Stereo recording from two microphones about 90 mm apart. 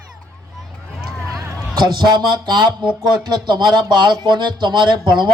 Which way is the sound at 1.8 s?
55° right (ahead or behind).